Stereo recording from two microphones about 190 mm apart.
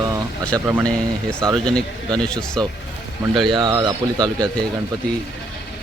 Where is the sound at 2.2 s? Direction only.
5° left (ahead or behind).